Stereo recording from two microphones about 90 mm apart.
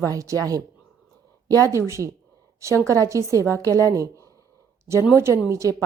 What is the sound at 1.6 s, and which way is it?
A woman's voice, 35° right (ahead or behind).